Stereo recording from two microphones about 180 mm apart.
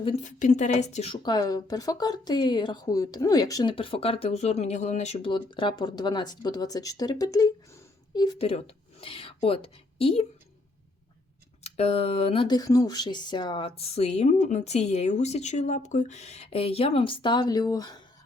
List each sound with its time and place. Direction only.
0.0 s speech: 35° left (ahead or behind)
11.6 s speech: 35° left (ahead or behind)